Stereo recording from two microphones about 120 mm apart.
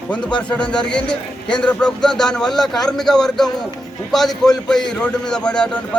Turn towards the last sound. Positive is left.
turn(degrees=10)  # may be behind; listen again after turning